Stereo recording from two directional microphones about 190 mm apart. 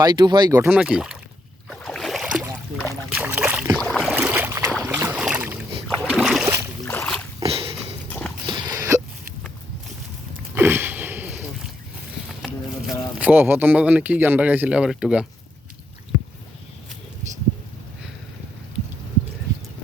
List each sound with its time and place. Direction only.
0.0 s speech: 20° right (ahead or behind)
0.7 s speech: 5° right (ahead or behind)
1.7 s a sound: 5° left (ahead or behind)
3.2 s boat: 10° right (ahead or behind)
3.8 s boat: 5° left (ahead or behind)
4.1 s boat: 5° right (ahead or behind)
6.8 s boat: 10° left (ahead or behind)
7.4 s a sound: 30° right (ahead or behind)
10.5 s a sound: 10° right (ahead or behind)
12.5 s speech: 5° right (ahead or behind)